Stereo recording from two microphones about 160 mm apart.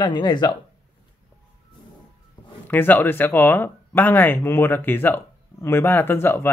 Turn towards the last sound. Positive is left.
turn(degrees=15)  # may be behind; listen again after turning